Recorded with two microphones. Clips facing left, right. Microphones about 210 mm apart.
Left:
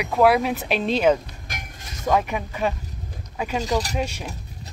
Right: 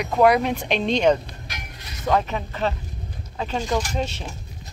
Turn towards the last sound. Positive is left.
turn(degrees=10)  # may be behind; listen again after turning